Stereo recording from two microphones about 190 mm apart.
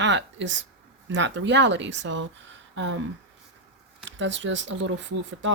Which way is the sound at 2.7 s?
85° right.